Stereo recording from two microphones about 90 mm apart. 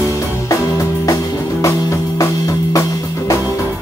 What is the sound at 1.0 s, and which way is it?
Music, 40° left (ahead or behind).